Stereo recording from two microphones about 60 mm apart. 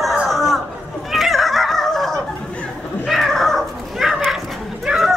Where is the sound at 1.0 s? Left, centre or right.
Centre.